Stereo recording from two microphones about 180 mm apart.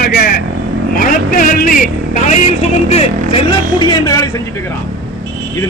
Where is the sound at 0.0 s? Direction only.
55° left (ahead or behind); by 3.4 s 35° left (ahead or behind).